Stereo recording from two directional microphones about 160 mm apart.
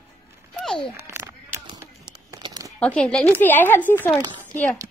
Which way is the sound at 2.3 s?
25° right (ahead or behind).